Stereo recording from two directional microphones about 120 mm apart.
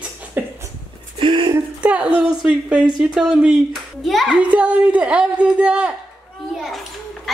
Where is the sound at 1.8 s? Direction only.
10° right (ahead or behind).